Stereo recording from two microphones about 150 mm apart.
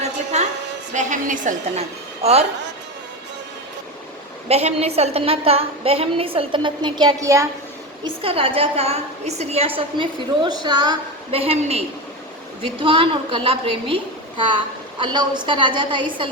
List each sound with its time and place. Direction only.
0.9 s a woman's voice: 60° right (ahead or behind)
4.4 s a woman's voice: 45° right (ahead or behind); by 7.4 s 20° right (ahead or behind)
8.0 s a woman's voice: 40° right (ahead or behind)